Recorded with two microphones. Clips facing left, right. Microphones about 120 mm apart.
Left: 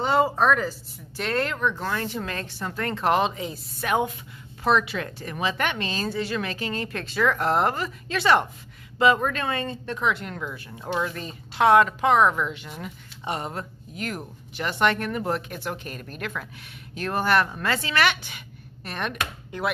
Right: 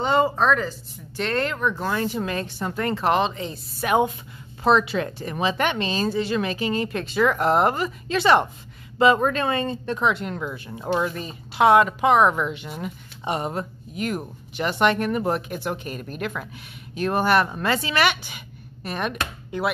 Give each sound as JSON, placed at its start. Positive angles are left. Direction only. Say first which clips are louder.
{"t": 0.0, "sound": "speech", "louder": "right 1 dB", "side_deg": 5}
{"t": 2.9, "sound": "speech", "louder": "even", "side_deg": 0}
{"t": 3.8, "sound": "speech", "louder": "right 4 dB", "side_deg": -20}
{"t": 11.0, "sound": "a woman's voice", "louder": "right 3 dB", "side_deg": -10}